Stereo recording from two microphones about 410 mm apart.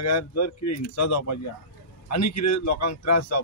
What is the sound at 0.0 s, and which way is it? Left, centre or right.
A man's voice, left.